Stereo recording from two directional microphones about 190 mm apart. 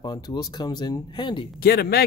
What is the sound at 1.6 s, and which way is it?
Speech, 55° left (ahead or behind).